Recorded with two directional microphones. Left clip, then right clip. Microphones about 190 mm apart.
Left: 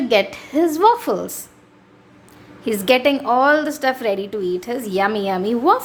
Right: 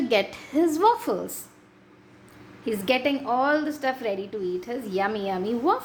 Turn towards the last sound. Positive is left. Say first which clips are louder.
# left 8 dB
turn(degrees=25)  # may be behind; listen again after turning